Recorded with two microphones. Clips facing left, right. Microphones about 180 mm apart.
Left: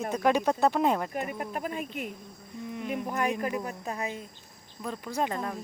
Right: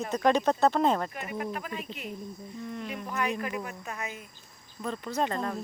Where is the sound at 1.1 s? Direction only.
45° left (ahead or behind).